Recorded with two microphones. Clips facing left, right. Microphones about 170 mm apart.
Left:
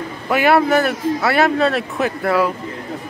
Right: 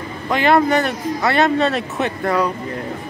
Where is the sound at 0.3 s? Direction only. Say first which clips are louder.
Left 1 dB; 10° left (ahead or behind).